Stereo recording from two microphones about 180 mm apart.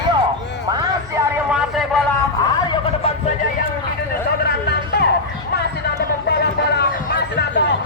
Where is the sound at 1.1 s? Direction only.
5° right (ahead or behind).